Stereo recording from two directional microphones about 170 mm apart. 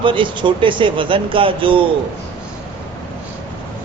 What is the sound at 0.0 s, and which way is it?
Speech, 30° right (ahead or behind).